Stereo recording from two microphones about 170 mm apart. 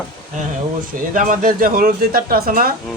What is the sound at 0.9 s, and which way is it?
Speech, 55° right (ahead or behind).